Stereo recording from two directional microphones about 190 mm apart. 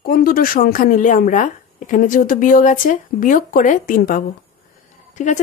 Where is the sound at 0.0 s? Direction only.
50° left (ahead or behind).